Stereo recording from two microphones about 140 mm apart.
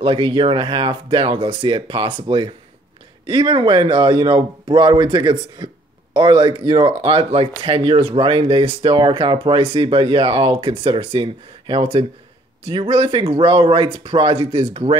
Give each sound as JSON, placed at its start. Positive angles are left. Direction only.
{"t": 0.0, "sound": "speech", "side_deg": -35}